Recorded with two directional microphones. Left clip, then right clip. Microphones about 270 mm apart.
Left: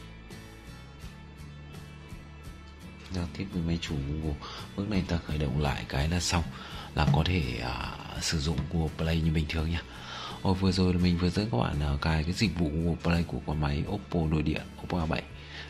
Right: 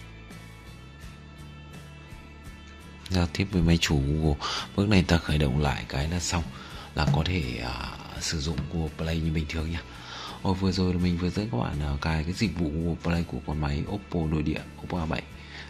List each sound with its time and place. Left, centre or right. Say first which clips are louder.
3.1 s speech: right 9 dB; right
5.6 s speech: right 2 dB; centre